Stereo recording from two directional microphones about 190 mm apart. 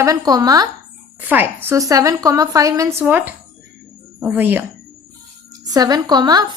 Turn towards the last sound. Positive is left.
turn(degrees=-20)  # may be behind; listen again after turning